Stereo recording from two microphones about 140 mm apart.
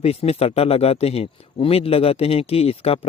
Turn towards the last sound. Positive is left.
turn(degrees=45)  # may be behind; listen again after turning